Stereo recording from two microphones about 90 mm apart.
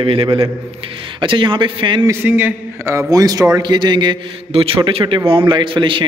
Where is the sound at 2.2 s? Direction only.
20° right (ahead or behind).